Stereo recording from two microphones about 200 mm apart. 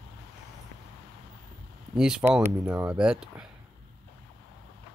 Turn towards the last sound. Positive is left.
turn(degrees=-5)  # may be behind; listen again after turning